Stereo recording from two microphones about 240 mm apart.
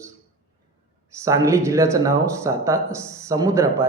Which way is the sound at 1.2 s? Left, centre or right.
Centre.